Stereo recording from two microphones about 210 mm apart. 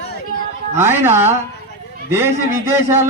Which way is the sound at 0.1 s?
45° left (ahead or behind).